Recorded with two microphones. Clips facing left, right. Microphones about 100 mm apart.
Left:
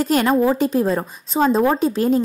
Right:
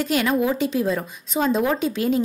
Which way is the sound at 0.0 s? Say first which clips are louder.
Left 4 dB; 40° left (ahead or behind).